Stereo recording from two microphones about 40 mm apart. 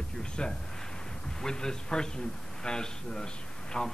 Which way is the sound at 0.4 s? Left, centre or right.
Left.